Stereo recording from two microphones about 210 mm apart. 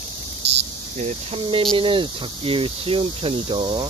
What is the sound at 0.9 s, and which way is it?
Speech, 30° right (ahead or behind).